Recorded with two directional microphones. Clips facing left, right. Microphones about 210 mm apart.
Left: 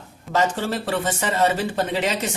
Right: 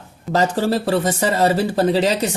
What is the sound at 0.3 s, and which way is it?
Speech, 40° right (ahead or behind).